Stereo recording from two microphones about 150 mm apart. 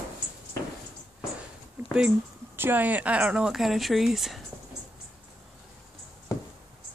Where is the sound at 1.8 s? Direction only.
15° right (ahead or behind).